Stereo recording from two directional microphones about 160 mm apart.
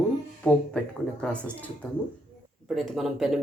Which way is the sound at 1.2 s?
5° left (ahead or behind).